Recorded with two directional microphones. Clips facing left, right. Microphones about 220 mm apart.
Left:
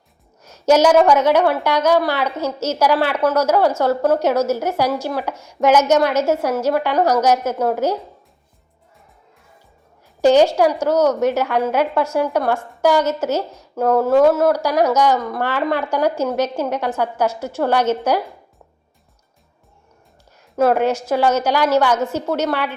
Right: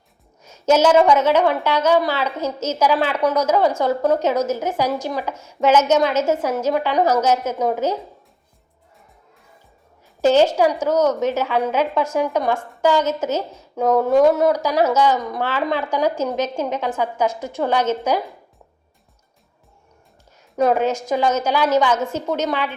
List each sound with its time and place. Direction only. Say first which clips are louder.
0.4 s a sound: left 2 dB; 10° left (ahead or behind)
1.1 s a woman's voice: left 1 dB; 10° left (ahead or behind)
10.2 s a woman's voice: left 2 dB; 10° left (ahead or behind)
20.6 s a woman's voice: left 2 dB; 5° left (ahead or behind)